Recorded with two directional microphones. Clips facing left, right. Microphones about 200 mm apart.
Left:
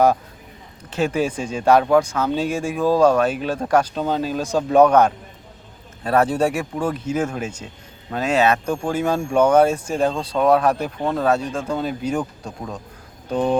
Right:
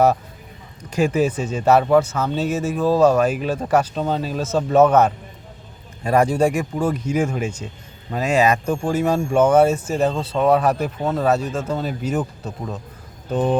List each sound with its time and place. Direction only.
0.9 s a man's voice: 10° right (ahead or behind)